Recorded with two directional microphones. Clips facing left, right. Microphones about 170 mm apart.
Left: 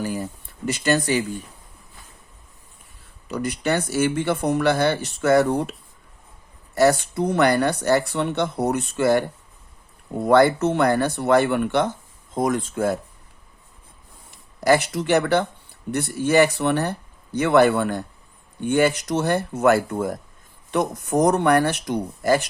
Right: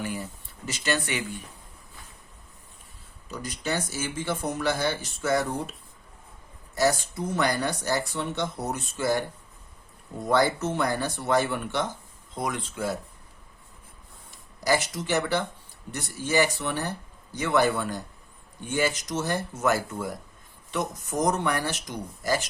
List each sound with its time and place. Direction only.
0.0 s a sound: 40° left (ahead or behind)
0.6 s speech: 55° left (ahead or behind)
0.9 s speech: 40° left (ahead or behind)
3.2 s speech: 70° left (ahead or behind)
6.7 s speech: 65° left (ahead or behind)
12.3 s speech: 45° left (ahead or behind)
14.3 s speech: 60° left (ahead or behind)